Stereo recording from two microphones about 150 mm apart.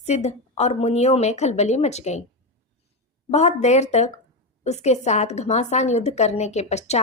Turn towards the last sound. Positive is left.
turn(degrees=50)  # may be behind; listen again after turning